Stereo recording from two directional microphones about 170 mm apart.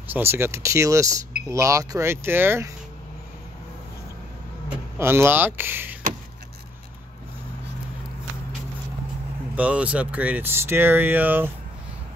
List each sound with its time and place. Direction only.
0.1 s speech: 15° right (ahead or behind)
4.9 s speech: 15° right (ahead or behind)
9.6 s speech: 10° right (ahead or behind)